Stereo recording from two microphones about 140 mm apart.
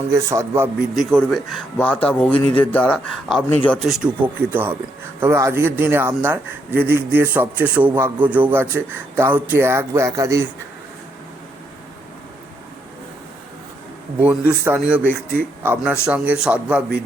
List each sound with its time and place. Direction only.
0.1 s a man's voice: 20° right (ahead or behind)
0.9 s speech: 5° left (ahead or behind)
4.4 s a man's voice: 15° right (ahead or behind)
14.2 s a man's voice: 10° right (ahead or behind)
15.0 s speech: 15° left (ahead or behind)
15.6 s a man's voice: 10° right (ahead or behind)